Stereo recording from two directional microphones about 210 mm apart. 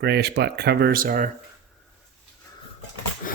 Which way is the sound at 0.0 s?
50° right (ahead or behind).